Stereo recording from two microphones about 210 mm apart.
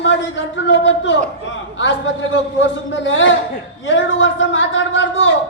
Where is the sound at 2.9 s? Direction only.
60° left (ahead or behind).